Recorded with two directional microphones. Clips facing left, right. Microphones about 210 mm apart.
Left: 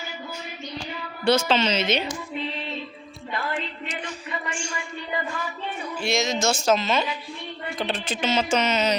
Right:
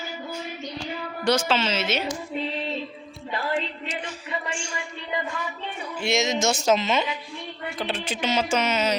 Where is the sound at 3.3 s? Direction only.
35° right (ahead or behind).